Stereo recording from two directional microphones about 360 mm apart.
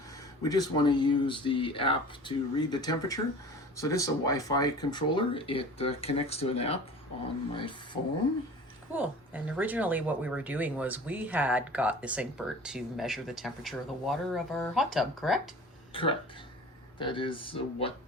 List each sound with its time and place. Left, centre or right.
0.4 s speech: centre
8.9 s speech: centre
15.9 s speech: centre